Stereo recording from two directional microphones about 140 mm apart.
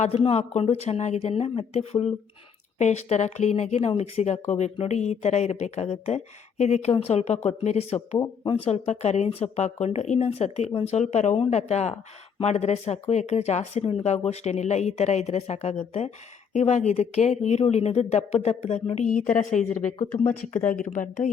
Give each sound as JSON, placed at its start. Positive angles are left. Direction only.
{"t": 0.2, "sound": "speech", "side_deg": 45}
{"t": 19.1, "sound": "a woman's voice", "side_deg": 75}
{"t": 20.7, "sound": "speech", "side_deg": 65}